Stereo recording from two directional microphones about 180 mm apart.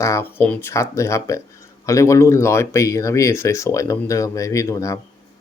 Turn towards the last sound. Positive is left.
turn(degrees=20)  # may be behind; listen again after turning